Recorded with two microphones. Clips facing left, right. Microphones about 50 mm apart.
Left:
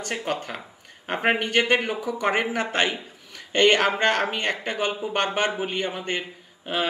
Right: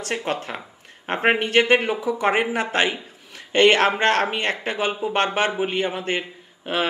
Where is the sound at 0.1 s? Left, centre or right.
Centre.